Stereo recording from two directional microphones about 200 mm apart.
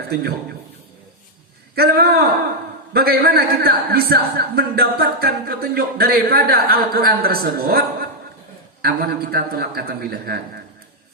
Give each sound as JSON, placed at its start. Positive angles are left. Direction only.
{"t": 0.1, "sound": "a man's voice", "side_deg": -50}
{"t": 1.7, "sound": "a man's voice", "side_deg": -50}